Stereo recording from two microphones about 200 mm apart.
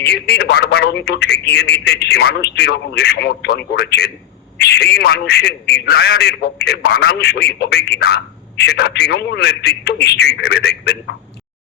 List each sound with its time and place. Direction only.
0.0 s a man's voice: 55° left (ahead or behind)